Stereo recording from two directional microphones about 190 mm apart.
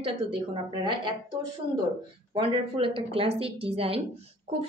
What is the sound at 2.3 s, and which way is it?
A woman's voice, 30° right (ahead or behind).